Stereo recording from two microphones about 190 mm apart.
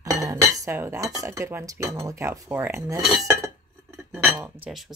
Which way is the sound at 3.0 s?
Centre (ahead or behind).